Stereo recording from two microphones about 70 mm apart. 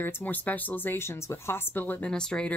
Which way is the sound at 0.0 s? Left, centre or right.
Left.